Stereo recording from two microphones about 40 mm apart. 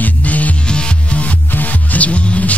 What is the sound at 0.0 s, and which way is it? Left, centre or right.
Music, left.